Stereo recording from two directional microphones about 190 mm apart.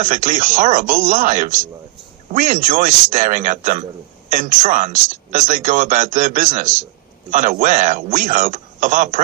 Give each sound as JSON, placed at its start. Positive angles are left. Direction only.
{"t": 0.0, "sound": "speech", "side_deg": -40}